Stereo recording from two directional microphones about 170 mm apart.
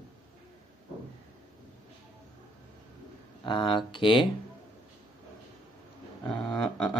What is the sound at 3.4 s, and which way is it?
Speech, 30° left (ahead or behind).